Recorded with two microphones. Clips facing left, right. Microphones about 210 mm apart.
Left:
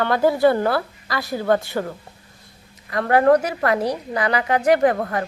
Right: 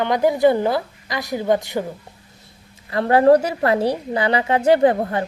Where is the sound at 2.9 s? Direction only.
30° right (ahead or behind).